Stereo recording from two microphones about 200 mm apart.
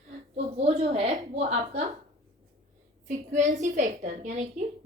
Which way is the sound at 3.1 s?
35° right (ahead or behind).